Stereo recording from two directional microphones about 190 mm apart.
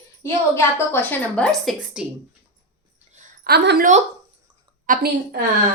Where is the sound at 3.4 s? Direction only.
55° right (ahead or behind).